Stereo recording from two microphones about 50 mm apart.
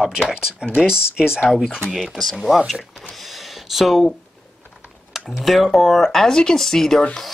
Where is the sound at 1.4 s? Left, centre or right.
Centre.